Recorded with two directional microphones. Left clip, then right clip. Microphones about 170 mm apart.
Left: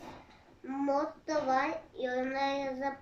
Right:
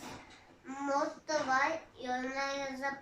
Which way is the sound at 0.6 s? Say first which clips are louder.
Left 2 dB; 55° left (ahead or behind).